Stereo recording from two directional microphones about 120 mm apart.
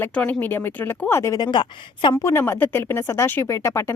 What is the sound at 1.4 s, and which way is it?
Speech, 40° left (ahead or behind).